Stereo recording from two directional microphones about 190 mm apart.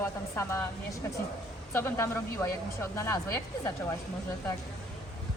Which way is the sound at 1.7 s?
15° left (ahead or behind).